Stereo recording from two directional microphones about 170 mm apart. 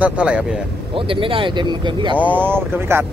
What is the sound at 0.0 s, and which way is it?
Speech, 5° right (ahead or behind).